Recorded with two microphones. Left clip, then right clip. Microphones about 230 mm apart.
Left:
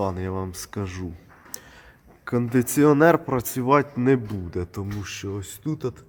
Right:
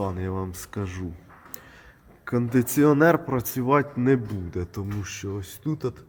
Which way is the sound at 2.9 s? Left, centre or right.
Centre.